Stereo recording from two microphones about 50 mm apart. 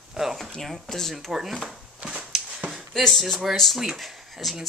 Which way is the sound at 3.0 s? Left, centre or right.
Centre.